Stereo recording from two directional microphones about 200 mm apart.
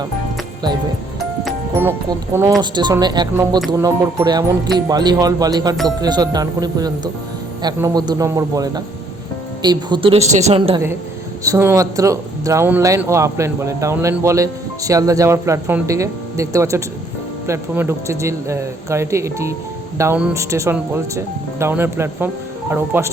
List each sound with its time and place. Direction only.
1.8 s speech: 10° right (ahead or behind); by 10.8 s 30° right (ahead or behind)
11.4 s speech: 15° right (ahead or behind)